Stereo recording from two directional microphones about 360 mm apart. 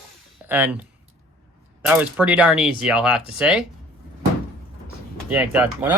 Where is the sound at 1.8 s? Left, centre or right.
Centre.